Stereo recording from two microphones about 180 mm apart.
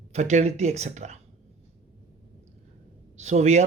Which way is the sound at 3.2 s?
40° right (ahead or behind).